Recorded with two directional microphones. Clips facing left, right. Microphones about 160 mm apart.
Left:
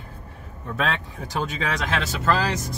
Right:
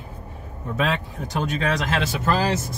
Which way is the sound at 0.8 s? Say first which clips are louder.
Right 2 dB; centre (ahead or behind).